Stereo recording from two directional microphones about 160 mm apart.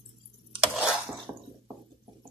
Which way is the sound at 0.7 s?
5° right (ahead or behind).